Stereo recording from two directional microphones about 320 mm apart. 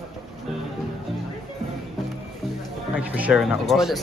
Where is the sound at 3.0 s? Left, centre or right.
Centre.